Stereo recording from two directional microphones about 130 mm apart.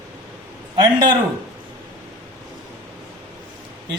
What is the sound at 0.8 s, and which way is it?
Speech, 35° right (ahead or behind).